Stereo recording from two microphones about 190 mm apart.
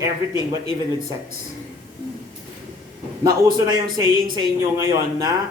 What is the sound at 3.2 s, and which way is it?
Speech, 20° right (ahead or behind).